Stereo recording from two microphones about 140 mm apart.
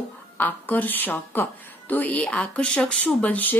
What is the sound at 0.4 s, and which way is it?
A woman's voice, 10° left (ahead or behind).